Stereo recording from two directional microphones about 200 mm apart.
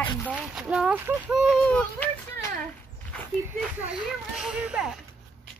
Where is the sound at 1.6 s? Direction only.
10° left (ahead or behind).